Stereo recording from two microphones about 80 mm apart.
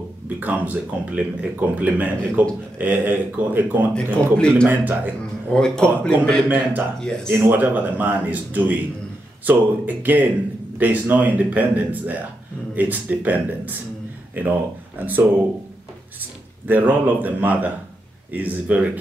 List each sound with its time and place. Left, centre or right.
0.4 s a man's voice: right
3.9 s speech: centre
4.6 s a man's voice: right
5.5 s speech: centre
7.2 s a man's voice: right
16.6 s a man's voice: right